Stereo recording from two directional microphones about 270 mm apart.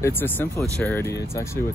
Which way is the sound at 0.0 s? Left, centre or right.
Centre.